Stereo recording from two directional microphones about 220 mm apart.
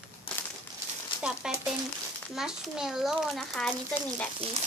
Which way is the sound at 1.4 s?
5° right (ahead or behind).